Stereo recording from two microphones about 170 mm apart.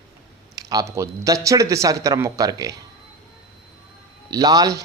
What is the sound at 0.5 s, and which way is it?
Speech, 20° right (ahead or behind).